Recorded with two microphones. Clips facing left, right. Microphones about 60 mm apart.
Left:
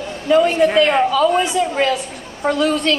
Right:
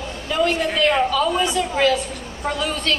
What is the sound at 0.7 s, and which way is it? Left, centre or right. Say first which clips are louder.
Speech: left 1 dB; left.